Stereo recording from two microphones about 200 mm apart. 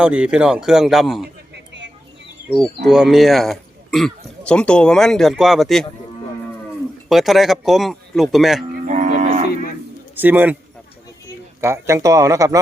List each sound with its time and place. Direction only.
0.0 s a man's voice: 5° right (ahead or behind)
1.7 s a sound: 60° right (ahead or behind)
2.8 s a man's voice: centre (ahead or behind)
7.1 s a man's voice: centre (ahead or behind)
8.9 s livestock: 35° right (ahead or behind)
10.2 s speech: 10° right (ahead or behind)
11.6 s speech: 15° right (ahead or behind)